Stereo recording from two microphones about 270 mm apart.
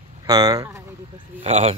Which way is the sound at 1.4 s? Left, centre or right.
Right.